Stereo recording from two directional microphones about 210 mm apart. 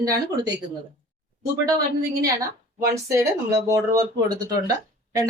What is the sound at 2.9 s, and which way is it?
Speech, 15° right (ahead or behind).